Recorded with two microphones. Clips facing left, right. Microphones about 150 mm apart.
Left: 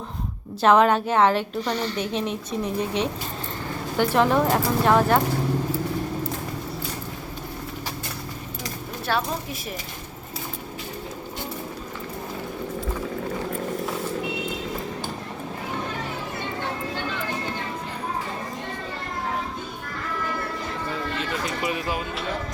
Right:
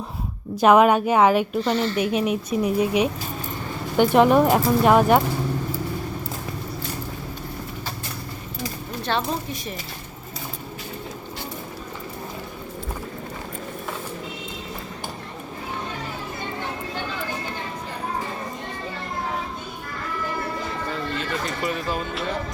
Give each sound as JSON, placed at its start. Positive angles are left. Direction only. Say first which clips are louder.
{"t": 0.6, "sound": "speech", "louder": "right 2 dB", "side_deg": -10}
{"t": 9.0, "sound": "speech", "louder": "right 1 dB", "side_deg": 5}
{"t": 21.2, "sound": "a sound", "louder": "right 1 dB", "side_deg": 5}